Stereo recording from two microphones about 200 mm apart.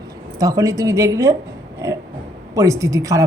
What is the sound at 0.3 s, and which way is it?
A woman's voice, 15° right (ahead or behind).